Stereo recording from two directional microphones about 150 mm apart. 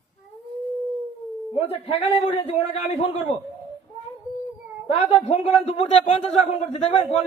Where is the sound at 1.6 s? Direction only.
40° left (ahead or behind).